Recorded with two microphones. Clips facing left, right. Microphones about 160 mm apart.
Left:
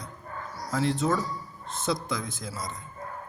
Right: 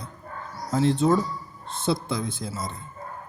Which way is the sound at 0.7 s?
30° right (ahead or behind).